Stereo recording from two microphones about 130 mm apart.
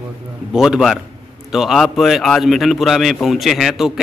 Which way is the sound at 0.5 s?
5° right (ahead or behind).